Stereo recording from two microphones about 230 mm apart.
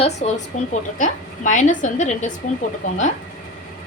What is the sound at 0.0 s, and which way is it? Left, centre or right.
A woman's voice, left.